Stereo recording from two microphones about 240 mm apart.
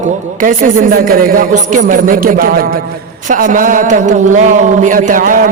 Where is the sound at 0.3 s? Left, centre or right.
Right.